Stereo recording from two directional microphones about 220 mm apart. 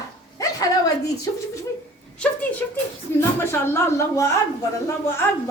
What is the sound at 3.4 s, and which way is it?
Speech, 10° left (ahead or behind).